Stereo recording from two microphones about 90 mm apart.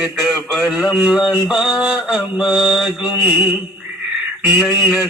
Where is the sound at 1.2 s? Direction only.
50° left (ahead or behind).